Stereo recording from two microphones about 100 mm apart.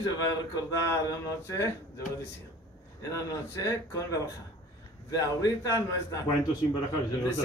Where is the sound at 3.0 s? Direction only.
30° left (ahead or behind).